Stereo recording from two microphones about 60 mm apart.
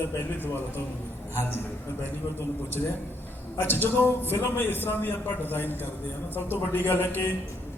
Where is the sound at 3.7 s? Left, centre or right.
Left.